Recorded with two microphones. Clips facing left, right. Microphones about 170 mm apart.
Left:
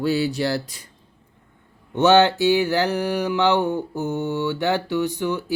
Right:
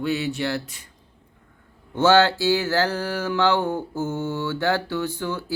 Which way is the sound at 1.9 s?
20° left (ahead or behind).